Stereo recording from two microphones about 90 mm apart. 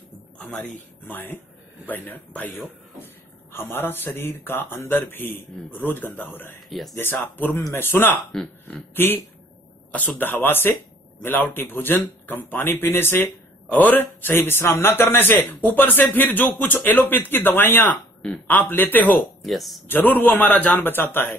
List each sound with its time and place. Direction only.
0.4 s speech: 15° left (ahead or behind)
6.7 s speech: centre (ahead or behind)
7.0 s speech: 20° left (ahead or behind)
19.4 s speech: centre (ahead or behind)
19.9 s speech: 20° left (ahead or behind)